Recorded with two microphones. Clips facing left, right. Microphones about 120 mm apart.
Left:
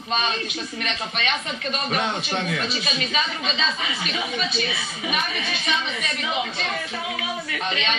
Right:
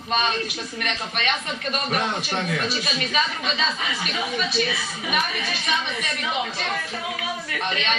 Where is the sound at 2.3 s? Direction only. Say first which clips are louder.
Even; 40° right (ahead or behind).